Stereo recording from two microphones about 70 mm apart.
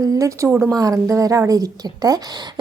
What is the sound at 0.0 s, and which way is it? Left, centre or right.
A woman's voice, right.